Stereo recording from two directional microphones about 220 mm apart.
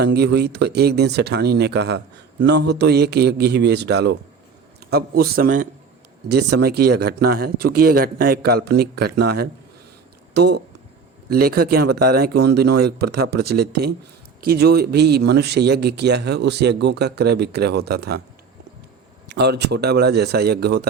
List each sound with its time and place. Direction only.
0.0 s a man's voice: 50° right (ahead or behind)
19.3 s a man's voice: 50° right (ahead or behind)